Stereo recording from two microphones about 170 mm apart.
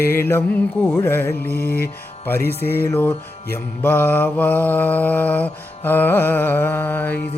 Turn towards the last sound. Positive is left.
turn(degrees=10)  # may be behind; listen again after turning